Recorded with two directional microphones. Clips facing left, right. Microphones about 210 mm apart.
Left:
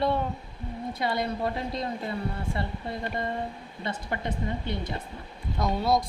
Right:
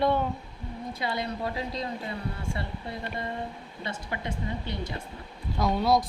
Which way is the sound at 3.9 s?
55° left (ahead or behind).